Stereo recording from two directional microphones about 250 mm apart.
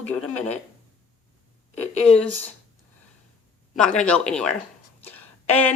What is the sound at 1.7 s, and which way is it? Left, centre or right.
Speech, left.